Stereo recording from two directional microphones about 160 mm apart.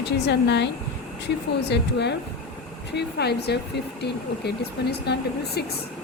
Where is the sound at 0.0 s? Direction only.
90° left.